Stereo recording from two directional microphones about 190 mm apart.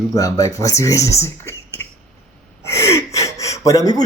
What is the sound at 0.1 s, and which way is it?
Speech, 20° left (ahead or behind).